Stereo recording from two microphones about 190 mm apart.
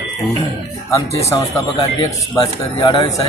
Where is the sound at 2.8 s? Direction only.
25° left (ahead or behind).